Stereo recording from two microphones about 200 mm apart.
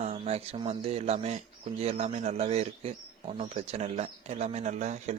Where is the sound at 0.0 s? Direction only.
30° right (ahead or behind).